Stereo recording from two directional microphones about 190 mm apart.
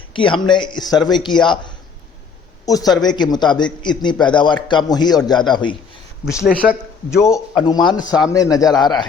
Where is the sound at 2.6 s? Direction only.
20° left (ahead or behind).